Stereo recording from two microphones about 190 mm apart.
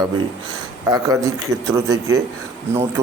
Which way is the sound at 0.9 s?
15° right (ahead or behind).